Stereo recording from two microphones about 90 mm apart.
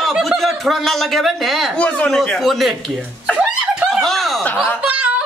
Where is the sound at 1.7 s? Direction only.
15° left (ahead or behind).